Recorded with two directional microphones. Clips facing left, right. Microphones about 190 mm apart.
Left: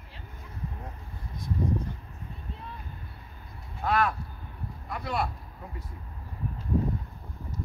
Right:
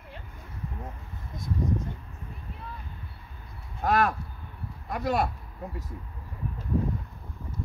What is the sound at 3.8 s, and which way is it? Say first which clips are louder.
Speech: right 2 dB; 45° right (ahead or behind).